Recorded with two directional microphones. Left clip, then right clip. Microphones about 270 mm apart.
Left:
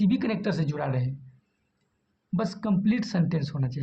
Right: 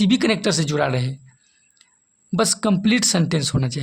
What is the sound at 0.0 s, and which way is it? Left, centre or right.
Speech, right.